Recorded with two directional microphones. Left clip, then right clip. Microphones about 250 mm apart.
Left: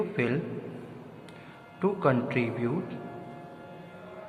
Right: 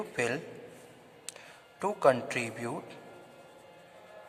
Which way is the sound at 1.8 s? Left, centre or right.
Right.